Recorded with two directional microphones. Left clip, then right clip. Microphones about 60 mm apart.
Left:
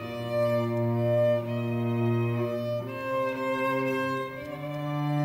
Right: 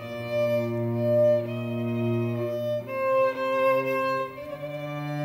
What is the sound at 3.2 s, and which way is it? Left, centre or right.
Music, right.